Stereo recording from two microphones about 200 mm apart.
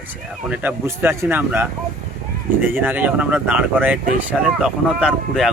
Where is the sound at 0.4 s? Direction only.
5° right (ahead or behind).